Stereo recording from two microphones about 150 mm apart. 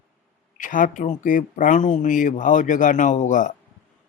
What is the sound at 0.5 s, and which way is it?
Speech, 60° left (ahead or behind).